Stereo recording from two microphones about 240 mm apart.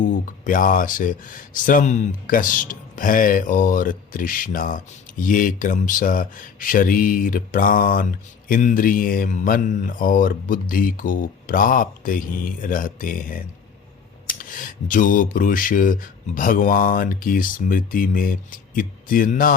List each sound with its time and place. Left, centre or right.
0.3 s speech: left